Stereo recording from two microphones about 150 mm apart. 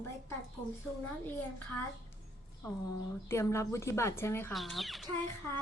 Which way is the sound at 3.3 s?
20° left (ahead or behind).